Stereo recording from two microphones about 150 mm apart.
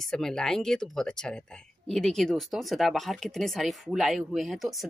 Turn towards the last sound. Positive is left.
turn(degrees=0)  # may be behind; listen again after turning